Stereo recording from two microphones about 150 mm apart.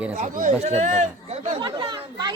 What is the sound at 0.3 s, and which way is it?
Speech, 55° right (ahead or behind).